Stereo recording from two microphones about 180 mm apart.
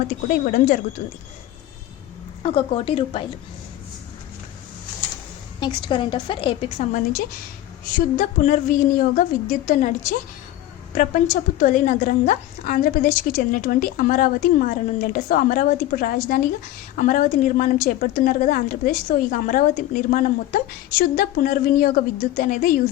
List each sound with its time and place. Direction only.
0.3 s a woman's voice: 50° left (ahead or behind)
2.4 s a woman's voice: 30° left (ahead or behind)
5.5 s a woman's voice: 25° left (ahead or behind)
7.9 s a woman's voice: 50° left (ahead or behind)